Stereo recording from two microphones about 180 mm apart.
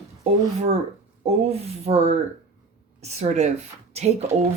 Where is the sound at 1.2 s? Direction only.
35° right (ahead or behind).